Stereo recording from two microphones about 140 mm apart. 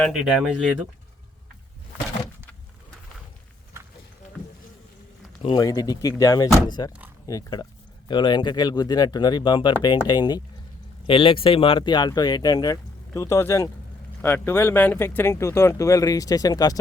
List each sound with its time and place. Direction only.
0.1 s speech: 5° right (ahead or behind)
5.5 s speech: 25° left (ahead or behind)